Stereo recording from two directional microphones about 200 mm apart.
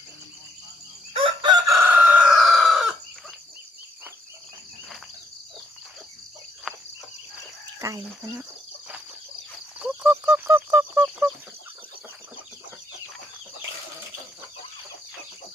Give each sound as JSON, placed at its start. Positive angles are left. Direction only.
{"t": 1.1, "sound": "chicken", "side_deg": -25}
{"t": 6.7, "sound": "cricket", "side_deg": 0}
{"t": 7.8, "sound": "cricket", "side_deg": -15}
{"t": 9.7, "sound": "a sound", "side_deg": -10}